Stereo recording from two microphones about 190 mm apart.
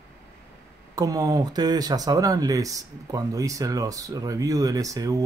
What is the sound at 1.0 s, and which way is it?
Speech, 20° right (ahead or behind).